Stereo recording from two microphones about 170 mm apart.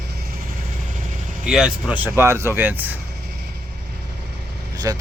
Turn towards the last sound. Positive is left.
turn(degrees=-20)  # may be behind; listen again after turning